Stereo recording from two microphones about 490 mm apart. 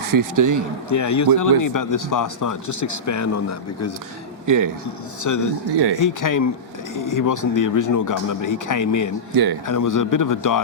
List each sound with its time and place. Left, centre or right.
0.1 s speech: right
0.9 s speech: left
4.4 s a man's voice: right
5.2 s speech: left
9.3 s speech: right
9.6 s speech: left